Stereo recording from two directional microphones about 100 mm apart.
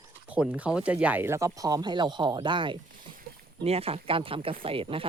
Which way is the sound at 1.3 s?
35° right (ahead or behind).